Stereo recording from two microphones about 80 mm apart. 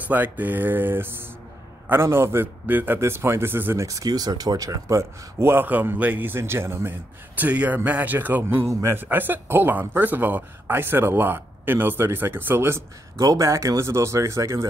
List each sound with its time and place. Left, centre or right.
0.1 s speech: right
3.0 s speech: right
3.8 s speech: right
13.2 s speech: right